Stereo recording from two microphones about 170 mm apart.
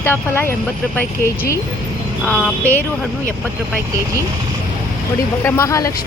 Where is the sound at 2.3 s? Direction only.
10° left (ahead or behind).